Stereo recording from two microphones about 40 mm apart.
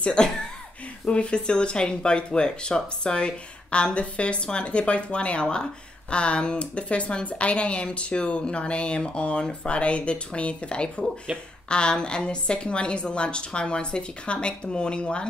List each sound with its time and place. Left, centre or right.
0.0 s speech: left
11.3 s speech: centre
11.7 s speech: left